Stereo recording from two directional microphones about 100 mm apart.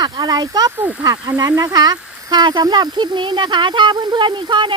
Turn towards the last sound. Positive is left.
turn(degrees=-55)  # may be behind; listen again after turning